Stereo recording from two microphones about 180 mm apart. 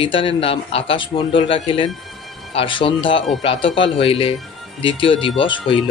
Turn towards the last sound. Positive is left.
turn(degrees=30)  # may be behind; listen again after turning